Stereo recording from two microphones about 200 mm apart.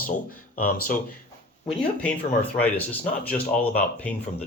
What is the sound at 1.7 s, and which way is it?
Speech, 5° left (ahead or behind).